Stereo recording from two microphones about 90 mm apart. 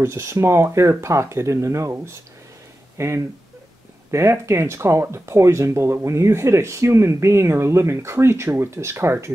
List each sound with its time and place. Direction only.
0.0 s speech: 30° right (ahead or behind)